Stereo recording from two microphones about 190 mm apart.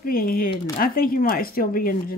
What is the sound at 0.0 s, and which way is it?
Speech, 50° left (ahead or behind).